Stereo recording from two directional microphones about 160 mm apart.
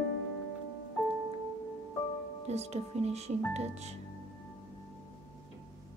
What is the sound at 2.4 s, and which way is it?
Speech, 40° right (ahead or behind).